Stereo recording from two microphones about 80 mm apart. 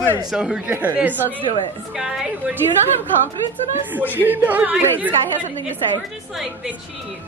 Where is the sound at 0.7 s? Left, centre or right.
Right.